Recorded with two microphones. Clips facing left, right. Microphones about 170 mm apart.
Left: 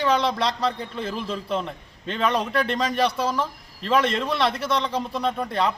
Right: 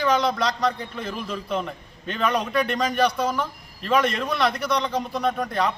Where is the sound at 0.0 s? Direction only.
30° left (ahead or behind).